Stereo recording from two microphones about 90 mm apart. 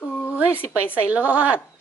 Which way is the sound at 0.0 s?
20° left (ahead or behind).